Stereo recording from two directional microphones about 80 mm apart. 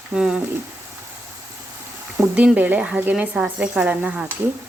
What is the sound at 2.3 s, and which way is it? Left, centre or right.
Speech, centre.